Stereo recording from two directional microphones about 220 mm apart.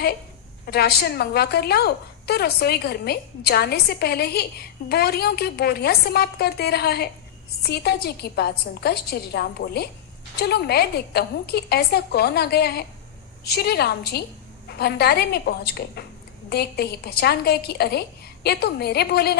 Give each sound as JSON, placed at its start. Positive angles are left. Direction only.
{"t": 0.6, "sound": "a woman's voice", "side_deg": 45}